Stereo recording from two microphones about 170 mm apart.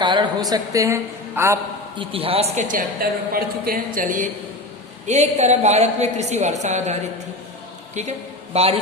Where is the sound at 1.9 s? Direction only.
35° right (ahead or behind).